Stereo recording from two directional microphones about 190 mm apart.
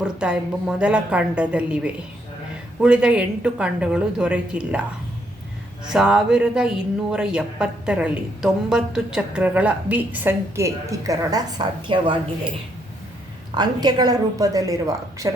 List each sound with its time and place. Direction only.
0.0 s speech: 5° right (ahead or behind)
5.9 s speech: 5° right (ahead or behind); by 12.1 s 25° right (ahead or behind)
13.5 s a woman's voice: 20° right (ahead or behind)